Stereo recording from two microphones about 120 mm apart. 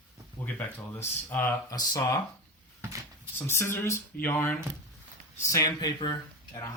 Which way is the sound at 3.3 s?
20° left (ahead or behind).